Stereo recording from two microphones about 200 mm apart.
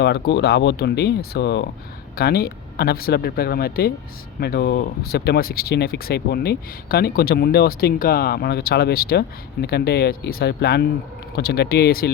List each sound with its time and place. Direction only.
0.0 s speech: 60° left (ahead or behind)